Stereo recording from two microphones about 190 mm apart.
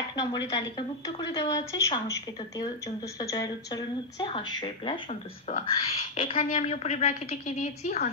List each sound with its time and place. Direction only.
0.1 s a woman's voice: 20° left (ahead or behind); by 8.1 s 35° left (ahead or behind)